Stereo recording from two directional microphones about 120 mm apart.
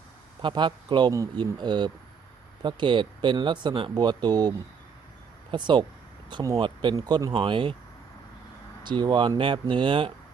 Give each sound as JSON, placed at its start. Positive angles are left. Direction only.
{"t": 0.4, "sound": "speech", "side_deg": -40}
{"t": 8.9, "sound": "speech", "side_deg": -40}